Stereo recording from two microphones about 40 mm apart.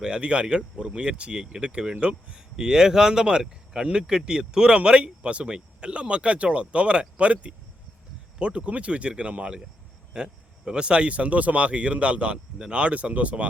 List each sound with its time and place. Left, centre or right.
0.0 s speech: right
2.6 s speech: centre; by 13.5 s right